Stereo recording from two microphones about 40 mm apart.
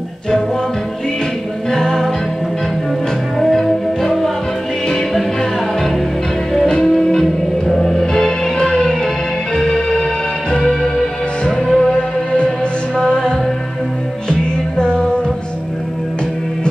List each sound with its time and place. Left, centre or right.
1.7 s music: centre
3.3 s music: centre
6.8 s music: centre
14.4 s music: left